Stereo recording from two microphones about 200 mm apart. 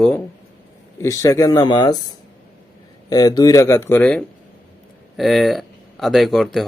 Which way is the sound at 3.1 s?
20° left (ahead or behind).